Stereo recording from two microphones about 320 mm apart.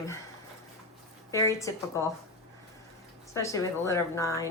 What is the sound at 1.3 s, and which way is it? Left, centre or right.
Speech, centre.